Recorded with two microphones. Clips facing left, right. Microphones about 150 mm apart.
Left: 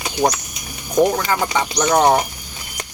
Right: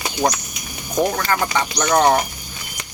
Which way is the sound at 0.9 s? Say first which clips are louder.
Left 3 dB; 15° left (ahead or behind).